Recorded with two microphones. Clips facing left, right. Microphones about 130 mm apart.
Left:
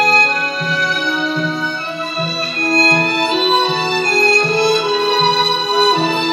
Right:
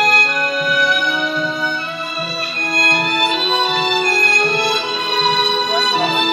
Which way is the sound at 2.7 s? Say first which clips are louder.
Left 6 dB; 30° left (ahead or behind).